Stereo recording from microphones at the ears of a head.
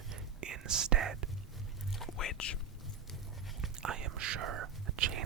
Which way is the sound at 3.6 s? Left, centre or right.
Right.